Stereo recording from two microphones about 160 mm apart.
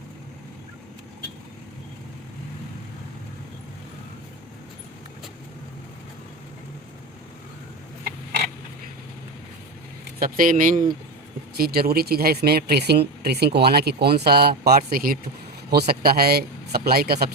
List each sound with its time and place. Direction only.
10.2 s speech: 65° right (ahead or behind)
11.5 s a man's voice: 70° right (ahead or behind)